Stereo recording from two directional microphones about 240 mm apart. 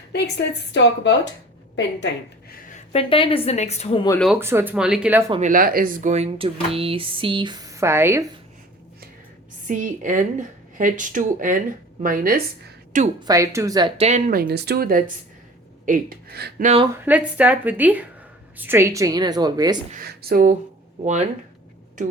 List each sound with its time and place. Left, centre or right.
0.1 s a woman's voice: left
2.5 s a woman's voice: left
4.2 s speech: centre
5.3 s speech: right; by 8.3 s centre
9.6 s speech: right
13.1 s speech: centre; by 16.8 s right
16.8 s a woman's voice: centre
19.9 s speech: right
22.0 s speech: right